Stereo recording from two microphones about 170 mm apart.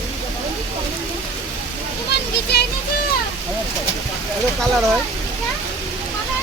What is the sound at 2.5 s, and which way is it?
Speech, 75° left (ahead or behind).